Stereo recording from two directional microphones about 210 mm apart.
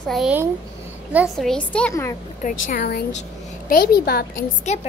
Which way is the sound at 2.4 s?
40° left (ahead or behind).